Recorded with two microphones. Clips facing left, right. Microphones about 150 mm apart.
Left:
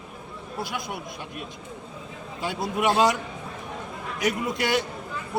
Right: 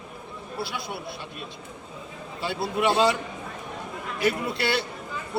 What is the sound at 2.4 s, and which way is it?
Speech, 15° left (ahead or behind).